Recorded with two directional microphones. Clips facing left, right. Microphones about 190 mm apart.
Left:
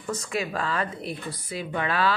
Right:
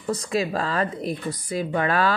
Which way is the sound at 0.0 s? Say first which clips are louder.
Right 5 dB; 35° right (ahead or behind).